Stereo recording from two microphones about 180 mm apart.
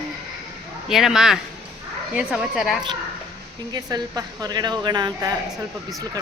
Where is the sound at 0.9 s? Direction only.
Centre (ahead or behind).